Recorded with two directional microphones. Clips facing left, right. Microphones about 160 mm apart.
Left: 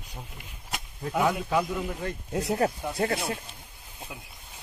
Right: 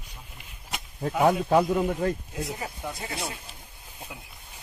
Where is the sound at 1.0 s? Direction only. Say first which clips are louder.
Right 4 dB; 40° right (ahead or behind).